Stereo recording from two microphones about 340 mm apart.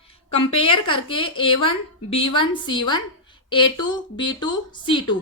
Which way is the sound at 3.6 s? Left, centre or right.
Left.